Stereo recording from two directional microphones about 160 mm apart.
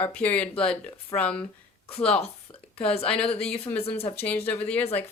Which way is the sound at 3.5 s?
40° left (ahead or behind).